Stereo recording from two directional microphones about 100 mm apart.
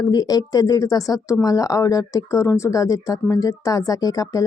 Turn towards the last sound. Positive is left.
turn(degrees=35)  # may be behind; listen again after turning